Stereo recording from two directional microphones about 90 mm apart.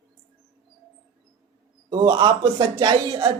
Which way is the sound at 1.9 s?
50° right (ahead or behind).